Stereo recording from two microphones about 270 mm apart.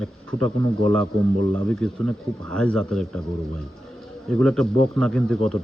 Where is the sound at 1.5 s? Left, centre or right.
Centre.